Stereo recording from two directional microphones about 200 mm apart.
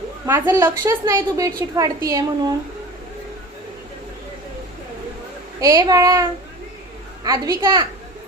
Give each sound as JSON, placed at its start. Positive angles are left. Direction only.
{"t": 0.3, "sound": "a woman's voice", "side_deg": -15}
{"t": 5.5, "sound": "a woman's voice", "side_deg": -15}
{"t": 7.3, "sound": "a child's voice", "side_deg": -20}